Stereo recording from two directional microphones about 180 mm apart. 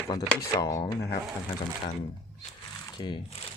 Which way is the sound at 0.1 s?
20° left (ahead or behind).